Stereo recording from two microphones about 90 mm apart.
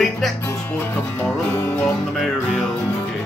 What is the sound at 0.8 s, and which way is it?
Music, 25° left (ahead or behind).